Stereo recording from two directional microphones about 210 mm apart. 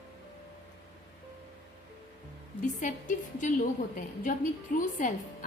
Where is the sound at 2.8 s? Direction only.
35° left (ahead or behind).